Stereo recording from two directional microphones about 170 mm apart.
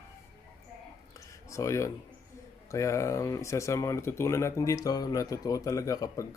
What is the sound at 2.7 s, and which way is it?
Speech, 15° left (ahead or behind).